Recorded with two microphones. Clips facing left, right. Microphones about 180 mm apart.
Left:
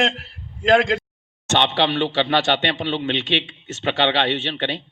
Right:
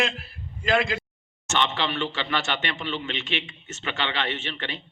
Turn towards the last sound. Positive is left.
turn(degrees=70)  # may be behind; listen again after turning